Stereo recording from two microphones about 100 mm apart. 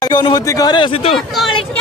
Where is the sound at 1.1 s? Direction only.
Centre (ahead or behind).